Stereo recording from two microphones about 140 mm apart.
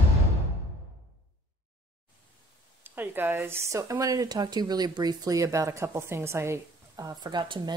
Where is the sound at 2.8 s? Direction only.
15° right (ahead or behind).